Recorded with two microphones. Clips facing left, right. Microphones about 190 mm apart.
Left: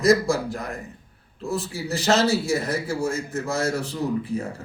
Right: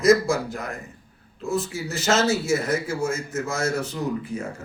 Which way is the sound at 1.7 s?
35° left (ahead or behind).